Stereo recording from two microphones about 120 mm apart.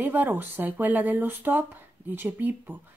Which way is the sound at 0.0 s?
15° right (ahead or behind).